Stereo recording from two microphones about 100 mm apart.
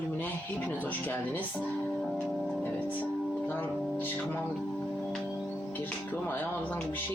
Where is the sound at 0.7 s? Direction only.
20° left (ahead or behind).